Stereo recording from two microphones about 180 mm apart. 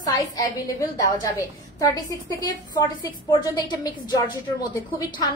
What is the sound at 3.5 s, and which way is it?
Speech, 25° left (ahead or behind).